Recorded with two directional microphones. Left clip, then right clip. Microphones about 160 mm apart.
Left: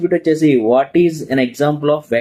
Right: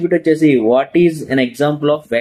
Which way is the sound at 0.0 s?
5° right (ahead or behind).